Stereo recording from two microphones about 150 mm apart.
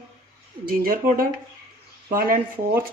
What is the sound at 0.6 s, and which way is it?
Speech, 70° right (ahead or behind).